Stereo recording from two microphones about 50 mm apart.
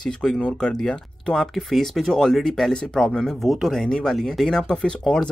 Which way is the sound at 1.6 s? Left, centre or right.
Centre.